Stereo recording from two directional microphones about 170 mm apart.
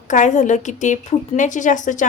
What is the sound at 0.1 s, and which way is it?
Speech, 45° left (ahead or behind).